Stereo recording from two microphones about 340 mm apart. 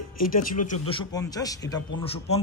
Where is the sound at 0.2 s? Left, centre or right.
Left.